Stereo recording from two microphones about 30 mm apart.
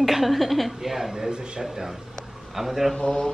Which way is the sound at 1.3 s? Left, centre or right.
Right.